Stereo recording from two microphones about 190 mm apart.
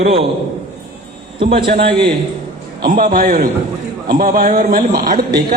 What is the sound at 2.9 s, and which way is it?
A man's voice, 50° right (ahead or behind).